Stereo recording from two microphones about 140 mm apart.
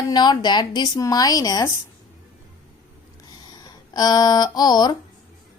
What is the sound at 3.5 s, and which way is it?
Speech, 30° left (ahead or behind).